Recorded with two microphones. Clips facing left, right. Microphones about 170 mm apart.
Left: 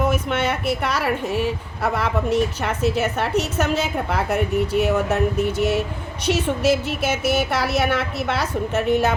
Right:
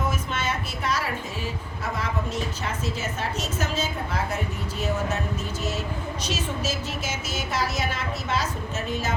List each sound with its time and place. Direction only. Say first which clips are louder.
0.0 s a woman's voice: left 8 dB; 65° left (ahead or behind)